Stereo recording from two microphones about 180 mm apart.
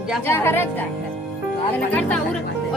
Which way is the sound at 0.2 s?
10° left (ahead or behind).